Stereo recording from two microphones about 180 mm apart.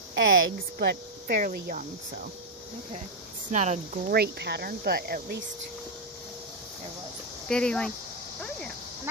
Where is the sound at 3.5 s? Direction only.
40° right (ahead or behind).